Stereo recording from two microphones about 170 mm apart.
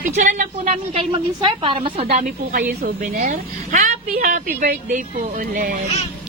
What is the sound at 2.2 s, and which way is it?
A woman's voice, 60° right (ahead or behind).